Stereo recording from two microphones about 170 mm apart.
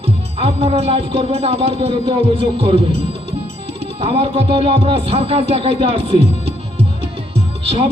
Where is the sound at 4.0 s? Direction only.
35° right (ahead or behind).